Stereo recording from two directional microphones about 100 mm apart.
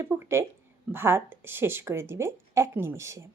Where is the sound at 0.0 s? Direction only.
25° right (ahead or behind).